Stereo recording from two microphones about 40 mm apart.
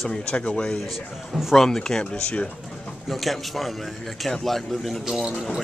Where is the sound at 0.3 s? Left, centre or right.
Left.